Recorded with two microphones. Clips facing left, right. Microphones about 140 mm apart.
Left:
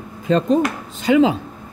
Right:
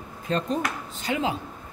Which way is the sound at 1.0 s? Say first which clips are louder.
Left 13 dB; 90° left.